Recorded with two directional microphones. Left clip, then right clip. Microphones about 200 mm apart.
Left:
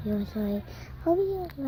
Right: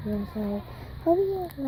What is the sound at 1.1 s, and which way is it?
Speech, 10° left (ahead or behind).